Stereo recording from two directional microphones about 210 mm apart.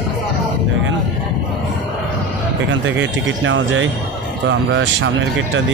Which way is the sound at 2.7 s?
60° right (ahead or behind).